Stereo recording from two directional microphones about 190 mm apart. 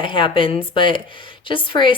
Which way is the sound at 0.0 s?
25° left (ahead or behind).